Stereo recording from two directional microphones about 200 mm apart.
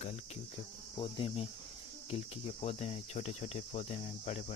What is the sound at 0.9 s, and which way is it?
Cricket, 25° left (ahead or behind).